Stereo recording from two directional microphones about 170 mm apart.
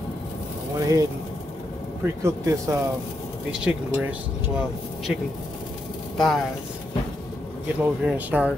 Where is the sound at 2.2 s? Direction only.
20° right (ahead or behind).